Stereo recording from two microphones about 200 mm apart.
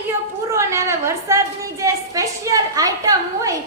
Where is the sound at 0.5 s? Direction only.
15° right (ahead or behind).